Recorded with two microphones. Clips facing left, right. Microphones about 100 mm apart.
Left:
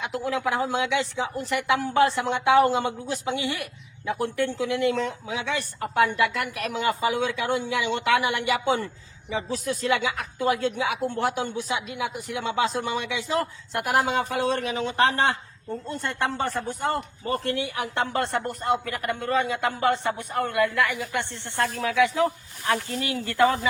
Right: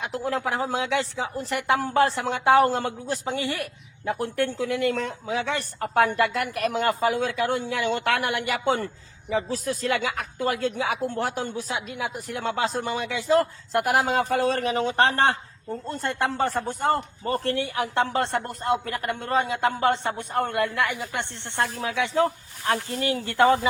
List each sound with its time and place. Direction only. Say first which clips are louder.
0.0 s a woman's voice: even; 40° right (ahead or behind)
15.9 s a man's voice: right 2 dB; 35° right (ahead or behind)